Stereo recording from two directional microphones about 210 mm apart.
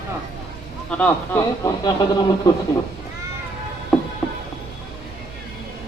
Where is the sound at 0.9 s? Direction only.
10° left (ahead or behind).